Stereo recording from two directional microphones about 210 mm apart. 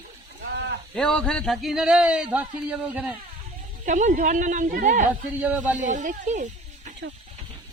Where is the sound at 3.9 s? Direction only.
35° right (ahead or behind).